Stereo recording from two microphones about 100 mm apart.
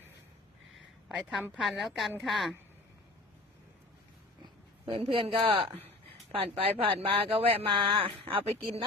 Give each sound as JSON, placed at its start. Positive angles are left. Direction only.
{"t": 1.0, "sound": "a woman's voice", "side_deg": -5}
{"t": 4.9, "sound": "speech", "side_deg": -65}